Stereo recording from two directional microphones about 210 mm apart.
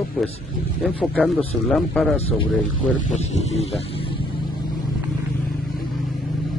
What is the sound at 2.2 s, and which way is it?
Speech, 30° left (ahead or behind).